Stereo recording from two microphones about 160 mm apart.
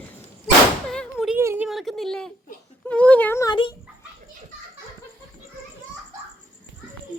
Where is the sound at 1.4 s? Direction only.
15° right (ahead or behind).